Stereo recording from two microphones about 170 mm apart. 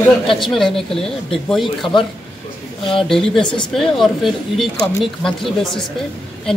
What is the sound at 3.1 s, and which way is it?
Speech, centre (ahead or behind).